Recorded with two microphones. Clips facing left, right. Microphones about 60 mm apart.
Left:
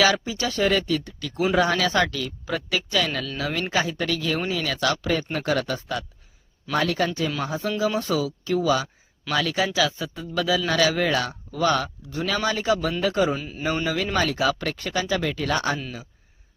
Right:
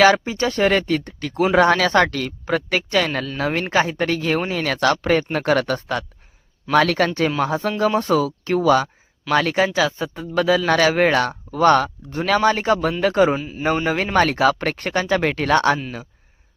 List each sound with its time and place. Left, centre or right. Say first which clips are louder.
0.0 s speech: right 6 dB; right
7.9 s speech: right 8 dB; right
13.3 s speech: right 5 dB; centre
13.8 s speech: right 6 dB; right